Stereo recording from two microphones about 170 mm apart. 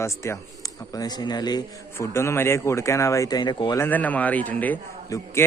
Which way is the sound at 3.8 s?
10° left (ahead or behind).